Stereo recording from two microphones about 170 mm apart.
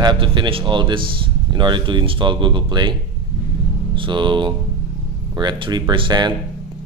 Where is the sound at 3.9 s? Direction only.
30° right (ahead or behind).